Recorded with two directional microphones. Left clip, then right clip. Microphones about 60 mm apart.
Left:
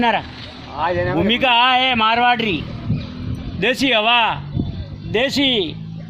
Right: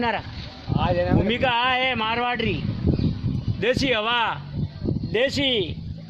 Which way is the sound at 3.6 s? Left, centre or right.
Right.